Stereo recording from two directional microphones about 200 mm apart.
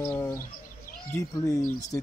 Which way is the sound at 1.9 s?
15° left (ahead or behind).